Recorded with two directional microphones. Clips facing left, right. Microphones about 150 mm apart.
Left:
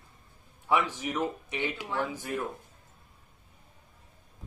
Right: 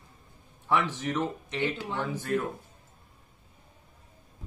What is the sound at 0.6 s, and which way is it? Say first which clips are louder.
Speech: even; 10° left (ahead or behind).